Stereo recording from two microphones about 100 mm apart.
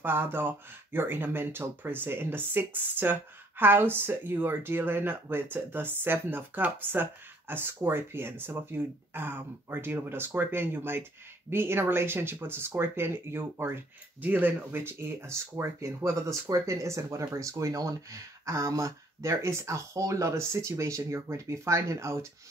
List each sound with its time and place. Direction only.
0.0 s speech: 20° right (ahead or behind)